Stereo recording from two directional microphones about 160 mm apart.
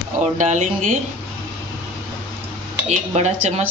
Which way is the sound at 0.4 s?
50° right (ahead or behind).